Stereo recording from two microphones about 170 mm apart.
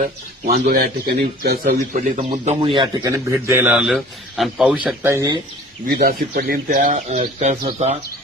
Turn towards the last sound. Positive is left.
turn(degrees=-40)  # may be behind; listen again after turning